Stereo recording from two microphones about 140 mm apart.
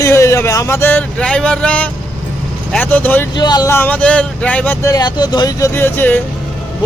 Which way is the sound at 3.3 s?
30° left (ahead or behind).